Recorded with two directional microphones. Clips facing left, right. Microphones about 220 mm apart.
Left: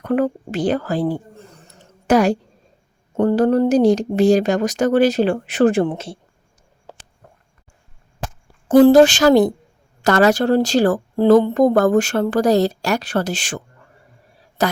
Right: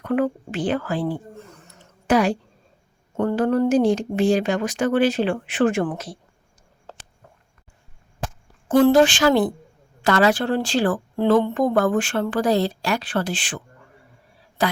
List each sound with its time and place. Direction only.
0.0 s speech: 40° left (ahead or behind)
5.8 s speech: 25° left (ahead or behind)
6.9 s a sound: 10° left (ahead or behind)
8.6 s speech: 35° left (ahead or behind)
14.6 s speech: 45° left (ahead or behind)